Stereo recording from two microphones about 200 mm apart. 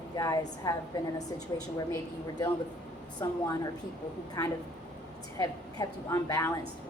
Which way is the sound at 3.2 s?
20° left (ahead or behind).